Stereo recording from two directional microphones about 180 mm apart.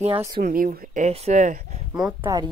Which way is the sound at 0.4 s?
45° right (ahead or behind).